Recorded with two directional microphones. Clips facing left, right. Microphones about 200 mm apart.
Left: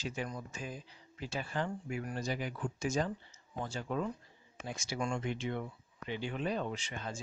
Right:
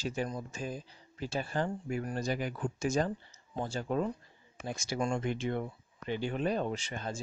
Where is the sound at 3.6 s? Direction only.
35° right (ahead or behind).